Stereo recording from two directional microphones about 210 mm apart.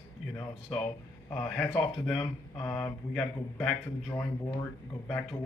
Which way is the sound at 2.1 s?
20° left (ahead or behind).